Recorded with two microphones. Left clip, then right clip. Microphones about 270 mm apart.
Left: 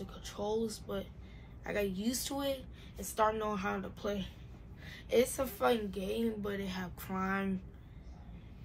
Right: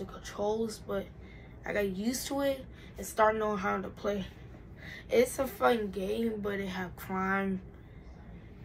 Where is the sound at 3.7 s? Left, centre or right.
Centre.